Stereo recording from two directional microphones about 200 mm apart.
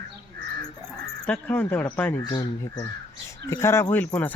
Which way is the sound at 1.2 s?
5° left (ahead or behind).